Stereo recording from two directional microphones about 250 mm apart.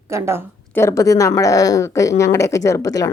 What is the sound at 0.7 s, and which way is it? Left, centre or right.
A woman's voice, centre.